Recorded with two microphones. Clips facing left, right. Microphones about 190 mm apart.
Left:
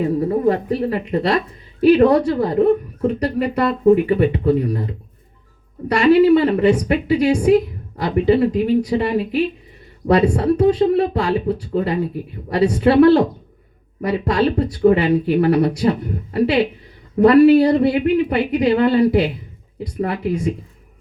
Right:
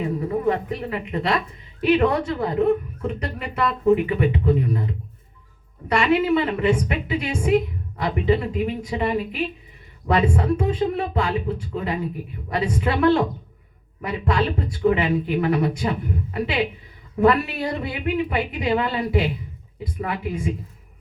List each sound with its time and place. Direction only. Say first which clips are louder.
0.0 s speech: left 6 dB; 35° left (ahead or behind)
10.1 s speech: left 5 dB; 40° left (ahead or behind)